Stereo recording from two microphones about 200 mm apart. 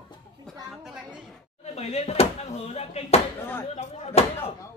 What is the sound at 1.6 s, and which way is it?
Slap, 30° left (ahead or behind).